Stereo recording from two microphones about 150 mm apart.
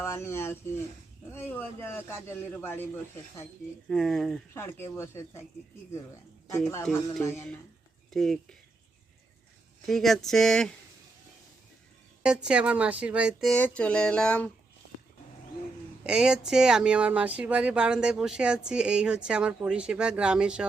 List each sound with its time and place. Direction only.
0.0 s a man's voice: 15° left (ahead or behind)
3.8 s speech: centre (ahead or behind)
4.5 s a man's voice: 15° left (ahead or behind)
7.1 s speech: 20° left (ahead or behind)
8.1 s speech: centre (ahead or behind)
9.8 s speech: centre (ahead or behind)
12.2 s speech: 5° right (ahead or behind)
13.6 s a man's voice: 10° left (ahead or behind)
16.0 s speech: 5° right (ahead or behind)